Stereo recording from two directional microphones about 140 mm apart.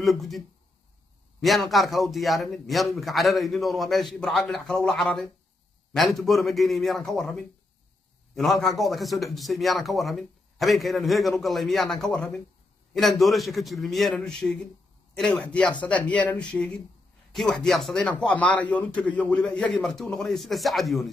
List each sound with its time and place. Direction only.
0.0 s a man's voice: centre (ahead or behind)
1.4 s a man's voice: centre (ahead or behind)